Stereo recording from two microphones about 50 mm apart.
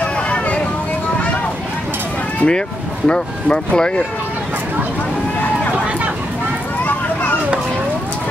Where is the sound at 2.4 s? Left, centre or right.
Centre.